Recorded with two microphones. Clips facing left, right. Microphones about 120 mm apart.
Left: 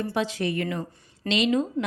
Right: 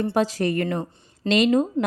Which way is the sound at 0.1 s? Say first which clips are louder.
Right 5 dB; 40° right (ahead or behind).